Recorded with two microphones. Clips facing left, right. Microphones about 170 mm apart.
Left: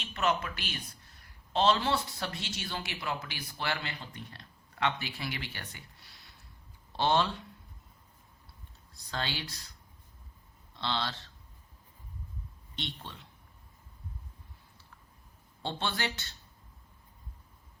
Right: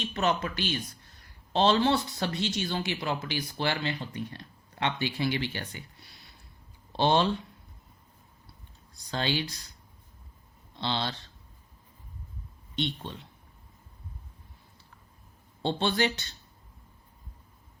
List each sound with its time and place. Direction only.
0.1 s speech: 25° right (ahead or behind)
6.9 s speech: 20° right (ahead or behind)
9.0 s speech: 20° right (ahead or behind)
10.8 s speech: 20° right (ahead or behind)
12.7 s a man's voice: 15° right (ahead or behind)
15.6 s speech: 20° right (ahead or behind)